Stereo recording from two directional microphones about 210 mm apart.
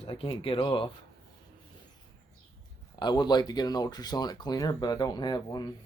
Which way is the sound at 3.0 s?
20° left (ahead or behind).